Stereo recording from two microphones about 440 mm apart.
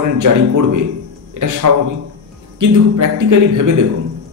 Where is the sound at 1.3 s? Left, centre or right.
Right.